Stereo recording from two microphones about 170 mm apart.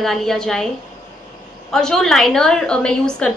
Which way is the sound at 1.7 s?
5° left (ahead or behind).